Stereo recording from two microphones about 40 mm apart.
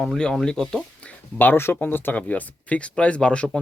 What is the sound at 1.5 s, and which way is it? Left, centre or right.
Speech, left.